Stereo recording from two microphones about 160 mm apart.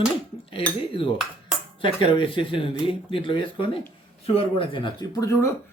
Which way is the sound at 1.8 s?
30° left (ahead or behind).